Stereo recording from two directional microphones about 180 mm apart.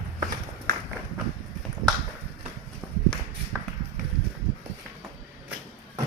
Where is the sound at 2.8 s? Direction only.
Centre (ahead or behind).